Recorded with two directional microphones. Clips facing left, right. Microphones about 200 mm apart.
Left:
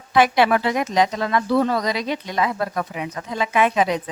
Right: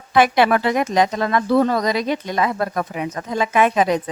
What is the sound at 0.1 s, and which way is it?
Speech, 50° right (ahead or behind).